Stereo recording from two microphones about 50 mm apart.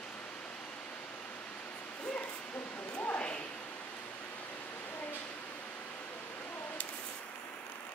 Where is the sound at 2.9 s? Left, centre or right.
Left.